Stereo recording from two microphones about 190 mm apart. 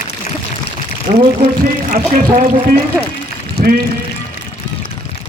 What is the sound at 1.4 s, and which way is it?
Speech, 45° right (ahead or behind).